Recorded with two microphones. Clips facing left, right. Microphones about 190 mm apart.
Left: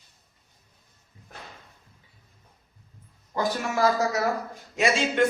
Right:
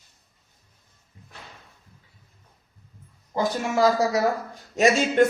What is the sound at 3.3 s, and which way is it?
Speech, 25° right (ahead or behind).